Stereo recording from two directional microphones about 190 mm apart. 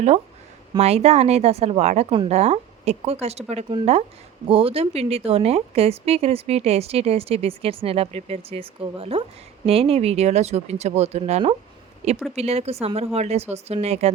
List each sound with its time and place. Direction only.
0.8 s a woman's voice: 35° right (ahead or behind)